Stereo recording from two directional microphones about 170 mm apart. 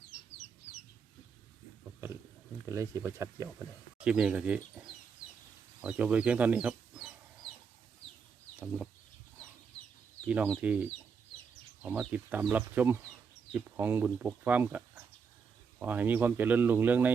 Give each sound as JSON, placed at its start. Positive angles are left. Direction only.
{"t": 2.6, "sound": "speech", "side_deg": -15}
{"t": 5.8, "sound": "chicken", "side_deg": -5}
{"t": 8.5, "sound": "chicken", "side_deg": -5}
{"t": 10.2, "sound": "speech", "side_deg": -10}